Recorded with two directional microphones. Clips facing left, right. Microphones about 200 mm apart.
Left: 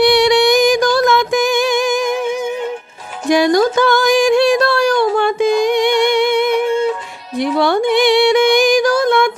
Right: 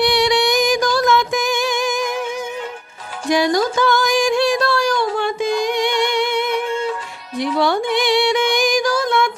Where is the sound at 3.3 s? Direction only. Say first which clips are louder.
Left 5 dB; 55° left (ahead or behind).